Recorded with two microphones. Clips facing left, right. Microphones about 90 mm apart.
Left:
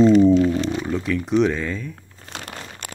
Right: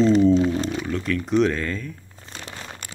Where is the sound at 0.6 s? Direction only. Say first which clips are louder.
Left 2 dB; 25° left (ahead or behind).